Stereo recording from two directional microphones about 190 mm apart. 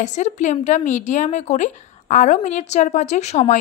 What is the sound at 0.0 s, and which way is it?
A woman's voice, 40° left (ahead or behind).